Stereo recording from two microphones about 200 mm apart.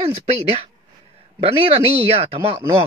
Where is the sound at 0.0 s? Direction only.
30° right (ahead or behind).